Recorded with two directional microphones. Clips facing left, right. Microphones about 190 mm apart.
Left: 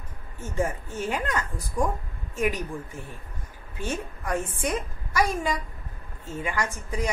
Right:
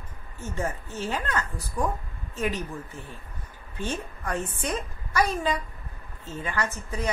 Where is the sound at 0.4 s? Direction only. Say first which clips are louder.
Left 3 dB; 10° left (ahead or behind).